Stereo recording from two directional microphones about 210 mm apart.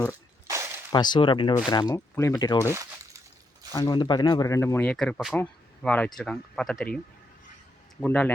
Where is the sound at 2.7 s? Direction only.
15° right (ahead or behind).